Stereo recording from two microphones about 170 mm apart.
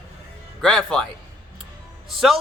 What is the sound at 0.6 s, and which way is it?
Speech, 5° left (ahead or behind).